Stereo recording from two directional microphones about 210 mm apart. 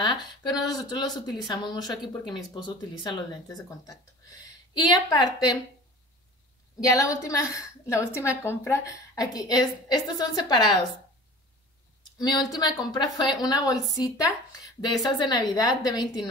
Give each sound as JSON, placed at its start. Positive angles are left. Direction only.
{"t": 0.0, "sound": "a woman's voice", "side_deg": 20}
{"t": 6.8, "sound": "a woman's voice", "side_deg": 15}
{"t": 12.2, "sound": "a woman's voice", "side_deg": 20}